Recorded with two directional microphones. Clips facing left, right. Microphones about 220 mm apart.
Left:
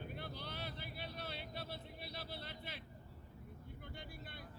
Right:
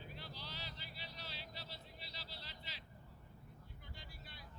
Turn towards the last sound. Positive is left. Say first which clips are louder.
# left 6 dB
turn(degrees=55)  # may be behind; listen again after turning